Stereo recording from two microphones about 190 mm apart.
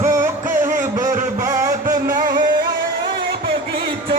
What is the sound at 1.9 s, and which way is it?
Music, 50° right (ahead or behind).